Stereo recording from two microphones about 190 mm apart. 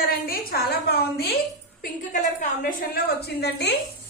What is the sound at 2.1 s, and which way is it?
A woman's voice, 40° left (ahead or behind).